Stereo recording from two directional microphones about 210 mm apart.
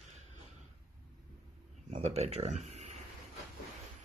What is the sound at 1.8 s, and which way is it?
Speech, 30° right (ahead or behind).